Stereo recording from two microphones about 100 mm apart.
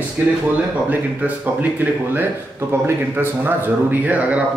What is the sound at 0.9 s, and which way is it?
A man's voice, 15° right (ahead or behind).